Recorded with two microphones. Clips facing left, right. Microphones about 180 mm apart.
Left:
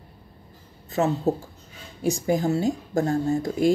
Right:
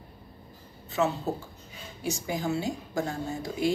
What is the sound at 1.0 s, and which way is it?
Speech, 35° left (ahead or behind).